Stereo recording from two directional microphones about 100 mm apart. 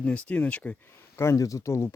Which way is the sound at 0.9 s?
25° left (ahead or behind).